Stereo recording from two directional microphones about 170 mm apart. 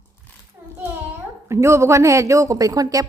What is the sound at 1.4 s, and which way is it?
A woman's voice, 15° right (ahead or behind).